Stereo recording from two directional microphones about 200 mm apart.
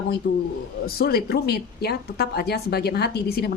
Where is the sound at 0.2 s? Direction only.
45° left (ahead or behind).